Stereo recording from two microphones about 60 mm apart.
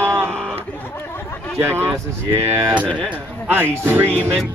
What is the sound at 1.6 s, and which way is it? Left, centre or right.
Music, right.